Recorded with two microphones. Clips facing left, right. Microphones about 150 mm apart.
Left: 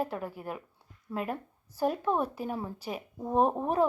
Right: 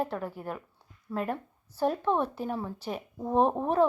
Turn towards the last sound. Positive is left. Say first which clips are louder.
# right 2 dB
turn(degrees=10)  # may be behind; listen again after turning